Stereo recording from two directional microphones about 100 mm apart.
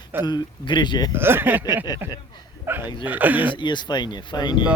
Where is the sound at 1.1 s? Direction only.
20° right (ahead or behind).